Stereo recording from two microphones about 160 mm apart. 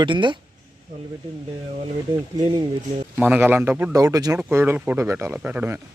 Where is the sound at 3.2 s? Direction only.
10° right (ahead or behind).